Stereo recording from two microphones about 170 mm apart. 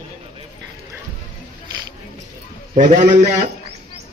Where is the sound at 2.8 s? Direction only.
50° right (ahead or behind).